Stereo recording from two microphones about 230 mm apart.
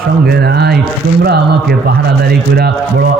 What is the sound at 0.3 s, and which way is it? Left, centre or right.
Speech, right.